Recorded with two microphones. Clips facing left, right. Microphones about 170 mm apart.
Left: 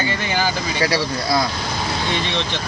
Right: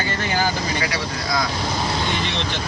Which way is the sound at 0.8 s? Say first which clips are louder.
Left 5 dB; 30° left (ahead or behind).